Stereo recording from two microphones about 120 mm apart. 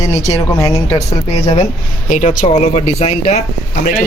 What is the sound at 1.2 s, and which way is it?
Speech, 60° left (ahead or behind).